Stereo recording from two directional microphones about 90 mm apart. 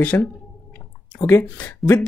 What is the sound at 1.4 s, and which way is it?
Speech, 15° left (ahead or behind).